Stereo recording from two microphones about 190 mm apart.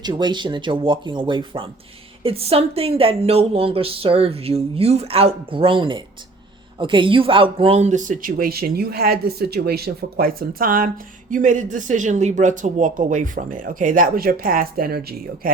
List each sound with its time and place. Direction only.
0.0 s speech: 25° right (ahead or behind); by 15.5 s 55° right (ahead or behind)